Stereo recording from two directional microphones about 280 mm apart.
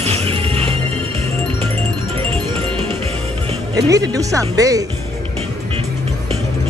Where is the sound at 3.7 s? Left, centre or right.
Centre.